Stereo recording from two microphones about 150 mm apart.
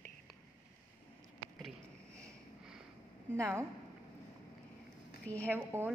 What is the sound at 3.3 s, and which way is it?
Speech, 20° right (ahead or behind).